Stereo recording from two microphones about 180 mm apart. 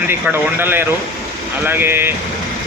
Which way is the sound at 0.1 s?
10° right (ahead or behind).